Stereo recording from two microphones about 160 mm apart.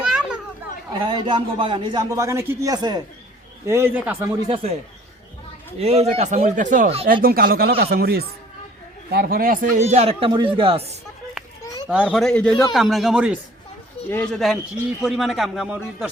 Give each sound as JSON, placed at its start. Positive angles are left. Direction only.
{"t": 0.0, "sound": "children playing", "side_deg": -5}
{"t": 1.0, "sound": "a man's voice", "side_deg": -30}
{"t": 3.7, "sound": "a man's voice", "side_deg": -15}
{"t": 4.4, "sound": "a man's voice", "side_deg": -40}
{"t": 5.8, "sound": "speech", "side_deg": -40}
{"t": 7.0, "sound": "speech", "side_deg": -65}
{"t": 11.9, "sound": "a man's voice", "side_deg": -5}
{"t": 14.1, "sound": "a man's voice", "side_deg": 5}